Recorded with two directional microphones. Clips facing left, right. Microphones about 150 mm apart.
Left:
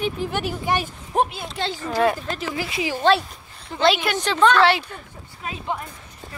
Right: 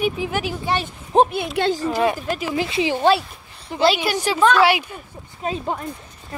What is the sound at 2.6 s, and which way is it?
Speech, 25° right (ahead or behind).